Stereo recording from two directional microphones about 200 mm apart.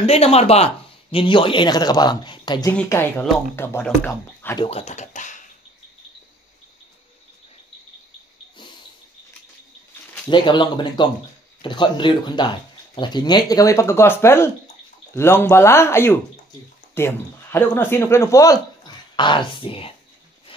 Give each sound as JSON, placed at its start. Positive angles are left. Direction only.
{"t": 0.0, "sound": "speech", "side_deg": 30}
{"t": 2.7, "sound": "speech", "side_deg": 10}
{"t": 4.6, "sound": "speech", "side_deg": 30}
{"t": 10.2, "sound": "speech", "side_deg": 25}